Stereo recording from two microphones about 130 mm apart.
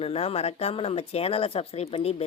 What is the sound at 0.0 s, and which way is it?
Speech, 50° left (ahead or behind).